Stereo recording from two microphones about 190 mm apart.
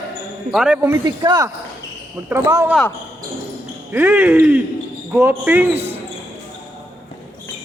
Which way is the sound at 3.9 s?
10° right (ahead or behind).